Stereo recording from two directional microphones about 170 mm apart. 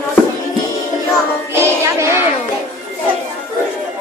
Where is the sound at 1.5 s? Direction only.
15° right (ahead or behind).